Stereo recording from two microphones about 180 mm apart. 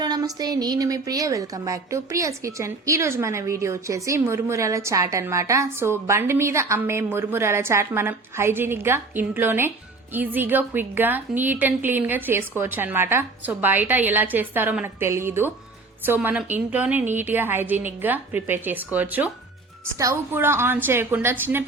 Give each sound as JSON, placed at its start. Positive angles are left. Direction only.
{"t": 0.0, "sound": "a woman's voice", "side_deg": -20}